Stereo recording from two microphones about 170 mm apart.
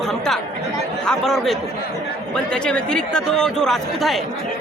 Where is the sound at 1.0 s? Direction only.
5° left (ahead or behind).